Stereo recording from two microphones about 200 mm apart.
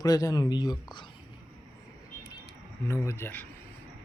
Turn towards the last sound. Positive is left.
turn(degrees=10)  # may be behind; listen again after turning